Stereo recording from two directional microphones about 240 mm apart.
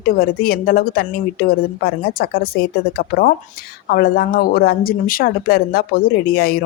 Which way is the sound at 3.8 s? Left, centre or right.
Left.